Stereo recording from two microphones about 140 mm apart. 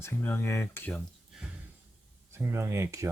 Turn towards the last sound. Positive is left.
turn(degrees=-20)  # may be behind; listen again after turning